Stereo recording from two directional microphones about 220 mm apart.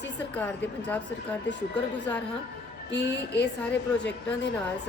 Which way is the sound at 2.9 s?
50° left (ahead or behind).